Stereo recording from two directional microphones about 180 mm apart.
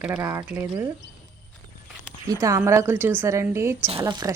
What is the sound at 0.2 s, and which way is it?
Speech, 15° right (ahead or behind).